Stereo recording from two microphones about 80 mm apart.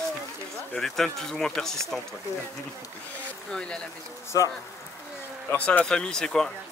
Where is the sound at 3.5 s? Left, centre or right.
Centre.